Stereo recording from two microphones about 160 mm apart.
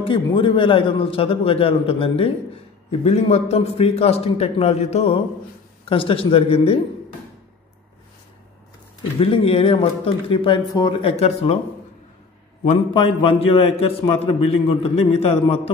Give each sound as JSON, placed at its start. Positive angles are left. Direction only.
{"t": 0.0, "sound": "a man's voice", "side_deg": 30}
{"t": 9.2, "sound": "a man's voice", "side_deg": 35}
{"t": 12.9, "sound": "a man's voice", "side_deg": 35}